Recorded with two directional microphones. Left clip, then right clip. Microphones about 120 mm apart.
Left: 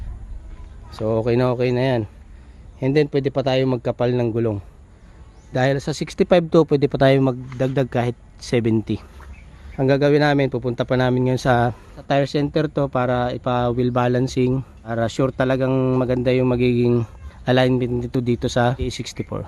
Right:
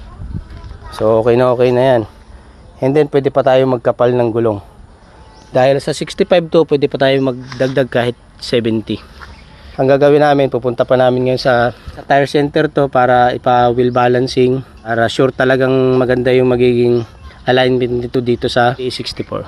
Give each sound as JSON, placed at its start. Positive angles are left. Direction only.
{"t": 0.9, "sound": "speech", "side_deg": 20}
{"t": 2.8, "sound": "speech", "side_deg": 35}
{"t": 7.7, "sound": "speech", "side_deg": 35}
{"t": 12.0, "sound": "speech", "side_deg": 30}
{"t": 14.8, "sound": "speech", "side_deg": 25}